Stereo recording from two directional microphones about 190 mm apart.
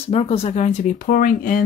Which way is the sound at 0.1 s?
30° left (ahead or behind).